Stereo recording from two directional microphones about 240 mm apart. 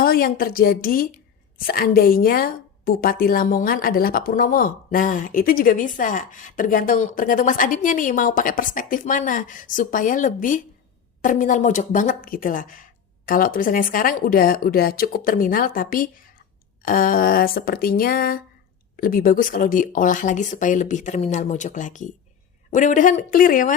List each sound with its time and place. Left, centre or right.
0.0 s a woman's voice: left